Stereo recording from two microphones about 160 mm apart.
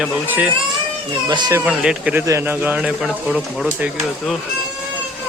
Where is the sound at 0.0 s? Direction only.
10° right (ahead or behind).